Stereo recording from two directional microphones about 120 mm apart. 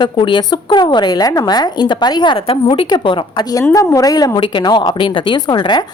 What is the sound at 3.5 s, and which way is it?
A woman's voice, 30° left (ahead or behind).